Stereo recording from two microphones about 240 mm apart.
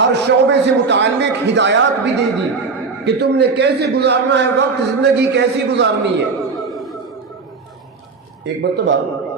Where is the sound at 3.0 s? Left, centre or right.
Right.